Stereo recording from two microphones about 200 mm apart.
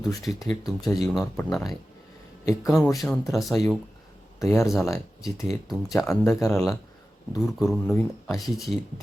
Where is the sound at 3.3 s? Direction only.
Centre (ahead or behind).